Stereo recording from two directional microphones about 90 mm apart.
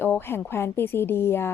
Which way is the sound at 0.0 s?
25° left (ahead or behind).